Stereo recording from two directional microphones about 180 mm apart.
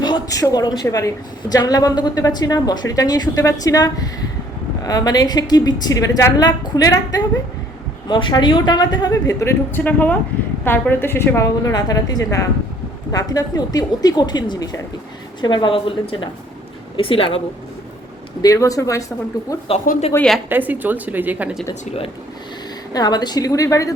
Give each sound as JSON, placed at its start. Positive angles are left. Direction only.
{"t": 0.0, "sound": "a woman's voice", "side_deg": 20}
{"t": 18.4, "sound": "a woman's voice", "side_deg": 20}
{"t": 20.1, "sound": "a woman's voice", "side_deg": 5}
{"t": 20.5, "sound": "speech", "side_deg": -10}
{"t": 22.9, "sound": "a woman's voice", "side_deg": 20}